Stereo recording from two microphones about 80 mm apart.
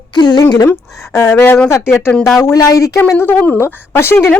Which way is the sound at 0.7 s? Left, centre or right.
Left.